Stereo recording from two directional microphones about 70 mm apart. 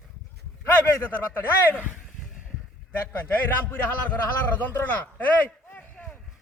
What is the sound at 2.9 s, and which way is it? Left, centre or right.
A man's voice, left.